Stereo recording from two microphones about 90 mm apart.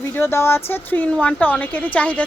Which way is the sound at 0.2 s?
30° left (ahead or behind).